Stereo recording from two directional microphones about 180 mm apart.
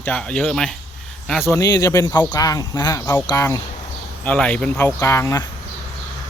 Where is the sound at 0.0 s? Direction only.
5° left (ahead or behind).